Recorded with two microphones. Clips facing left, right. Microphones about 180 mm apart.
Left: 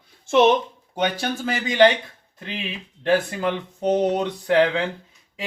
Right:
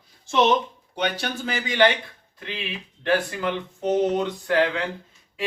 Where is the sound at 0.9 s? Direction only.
45° left (ahead or behind).